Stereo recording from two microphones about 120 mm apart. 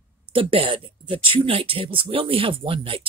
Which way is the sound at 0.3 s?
50° right (ahead or behind).